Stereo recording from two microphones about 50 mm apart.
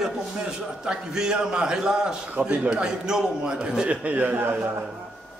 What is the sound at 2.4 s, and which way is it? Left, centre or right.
A man's voice, right.